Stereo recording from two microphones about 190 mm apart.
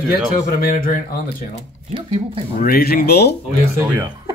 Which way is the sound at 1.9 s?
30° right (ahead or behind).